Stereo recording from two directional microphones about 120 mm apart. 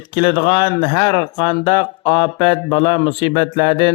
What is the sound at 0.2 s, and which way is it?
Speech, 40° left (ahead or behind).